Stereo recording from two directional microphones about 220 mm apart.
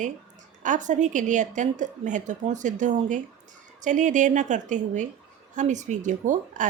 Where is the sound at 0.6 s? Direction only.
35° right (ahead or behind).